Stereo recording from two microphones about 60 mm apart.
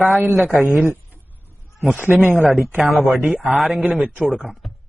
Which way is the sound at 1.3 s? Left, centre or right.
Left.